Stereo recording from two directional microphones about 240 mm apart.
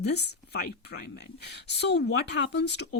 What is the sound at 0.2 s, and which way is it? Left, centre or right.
Speech, left.